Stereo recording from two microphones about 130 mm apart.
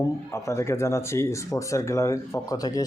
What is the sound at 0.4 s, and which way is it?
Speech, 20° left (ahead or behind).